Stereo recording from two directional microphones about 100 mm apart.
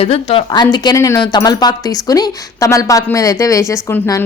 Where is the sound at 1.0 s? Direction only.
30° left (ahead or behind).